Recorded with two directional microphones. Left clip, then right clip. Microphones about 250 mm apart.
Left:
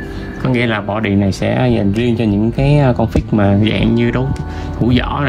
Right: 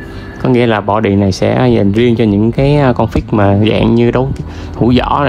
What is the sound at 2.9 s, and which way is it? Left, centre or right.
Speech, left.